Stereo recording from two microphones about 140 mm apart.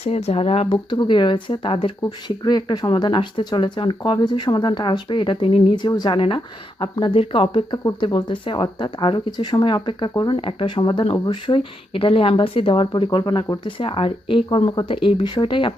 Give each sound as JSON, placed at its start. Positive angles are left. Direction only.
{"t": 0.0, "sound": "speech", "side_deg": 45}